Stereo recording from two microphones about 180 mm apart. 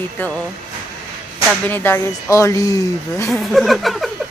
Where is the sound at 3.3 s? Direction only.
Centre (ahead or behind).